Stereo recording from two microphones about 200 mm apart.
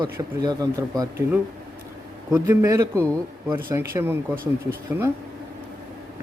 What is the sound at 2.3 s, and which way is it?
Speech, 15° right (ahead or behind).